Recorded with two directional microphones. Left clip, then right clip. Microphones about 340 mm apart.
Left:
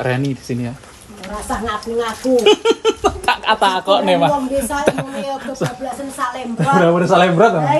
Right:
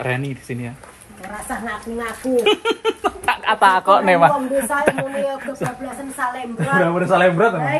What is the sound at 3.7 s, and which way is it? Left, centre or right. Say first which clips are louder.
Speech: right 1 dB; centre.